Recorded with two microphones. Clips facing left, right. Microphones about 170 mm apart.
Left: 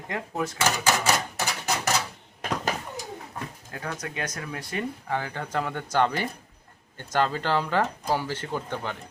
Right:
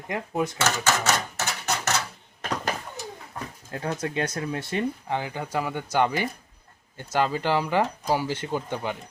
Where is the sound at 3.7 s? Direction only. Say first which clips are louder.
Right 7 dB; 30° right (ahead or behind); by 8.9 s 15° right (ahead or behind).